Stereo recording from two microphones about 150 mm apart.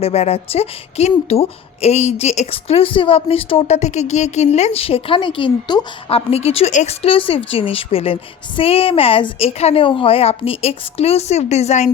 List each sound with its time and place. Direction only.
0.0 s a woman's voice: 45° left (ahead or behind)
6.1 s speech: 40° left (ahead or behind)